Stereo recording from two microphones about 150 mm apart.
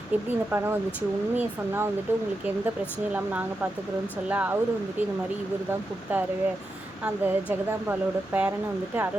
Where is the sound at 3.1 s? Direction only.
10° right (ahead or behind).